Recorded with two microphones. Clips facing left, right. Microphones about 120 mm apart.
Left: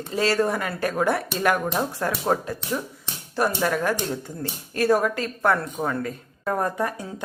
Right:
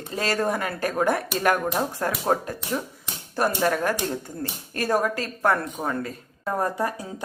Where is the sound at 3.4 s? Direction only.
45° right (ahead or behind).